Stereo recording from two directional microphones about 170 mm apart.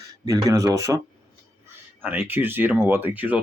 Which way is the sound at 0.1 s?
20° right (ahead or behind).